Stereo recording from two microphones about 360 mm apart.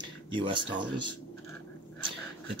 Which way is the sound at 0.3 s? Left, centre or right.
Centre.